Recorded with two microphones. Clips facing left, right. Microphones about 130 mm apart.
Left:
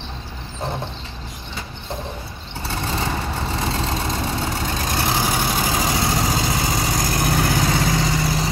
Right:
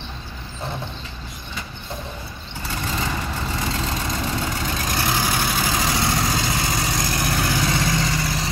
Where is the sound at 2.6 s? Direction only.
30° left (ahead or behind).